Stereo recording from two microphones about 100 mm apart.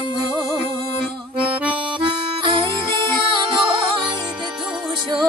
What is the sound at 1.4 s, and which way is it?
Accordion, 10° right (ahead or behind).